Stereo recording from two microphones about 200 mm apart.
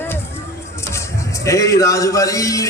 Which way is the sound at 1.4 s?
15° left (ahead or behind).